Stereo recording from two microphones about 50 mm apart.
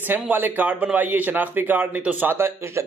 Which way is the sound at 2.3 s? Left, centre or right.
Right.